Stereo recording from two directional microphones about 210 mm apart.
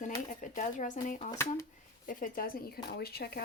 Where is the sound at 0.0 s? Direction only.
35° left (ahead or behind).